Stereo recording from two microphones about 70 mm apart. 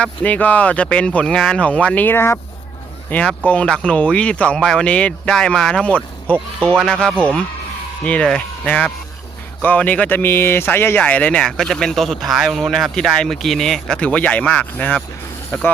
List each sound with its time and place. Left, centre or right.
0.0 s speech: centre
2.0 s speech: left
3.1 s speech: centre
11.0 s speech: centre
11.4 s speech: centre
14.0 s speech: centre